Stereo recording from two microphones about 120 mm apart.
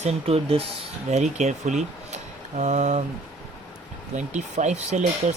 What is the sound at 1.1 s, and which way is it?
Speech, 75° right (ahead or behind).